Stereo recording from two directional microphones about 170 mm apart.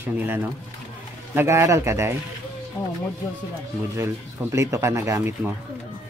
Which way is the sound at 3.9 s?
15° right (ahead or behind).